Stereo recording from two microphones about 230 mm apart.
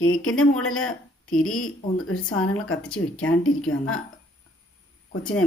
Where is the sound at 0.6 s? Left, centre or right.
Left.